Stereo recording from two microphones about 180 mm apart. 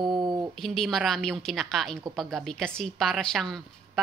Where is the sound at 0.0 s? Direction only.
25° right (ahead or behind).